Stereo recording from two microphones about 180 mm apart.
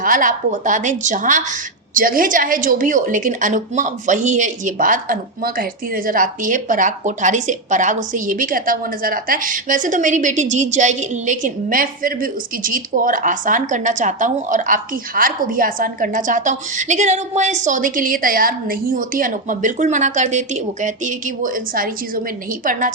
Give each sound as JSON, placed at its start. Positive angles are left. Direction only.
{"t": 0.0, "sound": "a woman's voice", "side_deg": -50}